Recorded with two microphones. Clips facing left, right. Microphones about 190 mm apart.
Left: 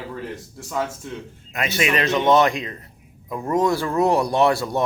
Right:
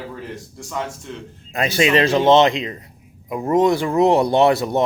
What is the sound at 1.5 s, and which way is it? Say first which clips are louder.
Speech: right 5 dB; 30° right (ahead or behind).